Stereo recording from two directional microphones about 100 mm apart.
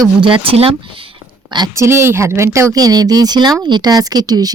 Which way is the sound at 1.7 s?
25° right (ahead or behind).